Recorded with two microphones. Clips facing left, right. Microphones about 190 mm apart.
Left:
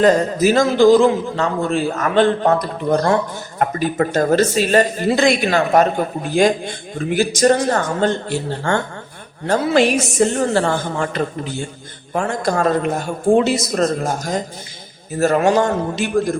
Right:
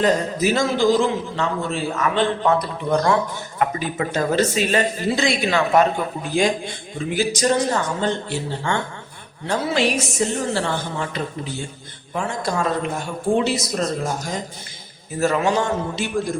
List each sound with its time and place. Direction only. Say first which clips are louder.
0.0 s a man's voice: left 5 dB; 45° left (ahead or behind)